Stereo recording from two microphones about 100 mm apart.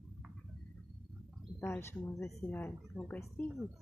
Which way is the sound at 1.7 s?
25° left (ahead or behind).